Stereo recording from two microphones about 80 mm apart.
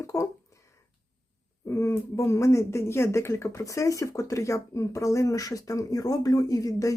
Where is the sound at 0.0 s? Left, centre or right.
Left.